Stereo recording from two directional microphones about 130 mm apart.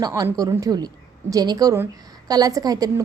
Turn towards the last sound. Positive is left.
turn(degrees=-30)  # may be behind; listen again after turning